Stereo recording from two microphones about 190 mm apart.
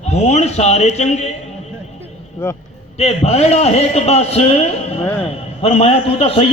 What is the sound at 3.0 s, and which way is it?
A man's voice, 35° left (ahead or behind).